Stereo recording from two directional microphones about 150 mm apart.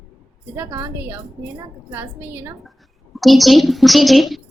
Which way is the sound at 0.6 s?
20° right (ahead or behind).